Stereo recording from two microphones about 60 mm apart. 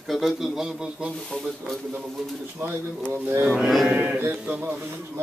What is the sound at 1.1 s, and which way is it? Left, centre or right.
Speech, centre.